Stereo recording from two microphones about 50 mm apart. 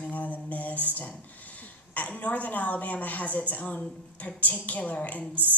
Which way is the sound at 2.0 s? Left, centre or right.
Left.